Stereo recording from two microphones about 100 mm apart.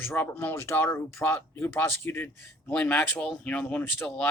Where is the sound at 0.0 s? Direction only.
25° left (ahead or behind).